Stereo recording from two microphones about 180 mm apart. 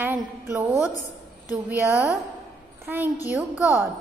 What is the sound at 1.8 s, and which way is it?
Speech, 15° left (ahead or behind).